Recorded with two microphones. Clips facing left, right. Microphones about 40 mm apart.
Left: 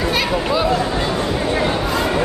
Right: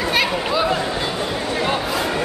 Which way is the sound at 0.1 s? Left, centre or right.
Centre.